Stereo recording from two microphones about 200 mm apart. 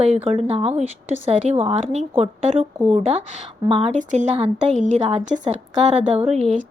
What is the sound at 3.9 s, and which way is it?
A woman's voice, 40° right (ahead or behind).